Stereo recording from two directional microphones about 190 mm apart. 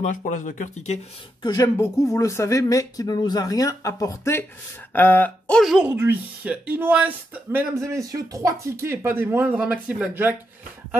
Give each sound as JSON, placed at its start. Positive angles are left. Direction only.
{"t": 0.0, "sound": "speech", "side_deg": 40}
{"t": 1.4, "sound": "speech", "side_deg": 20}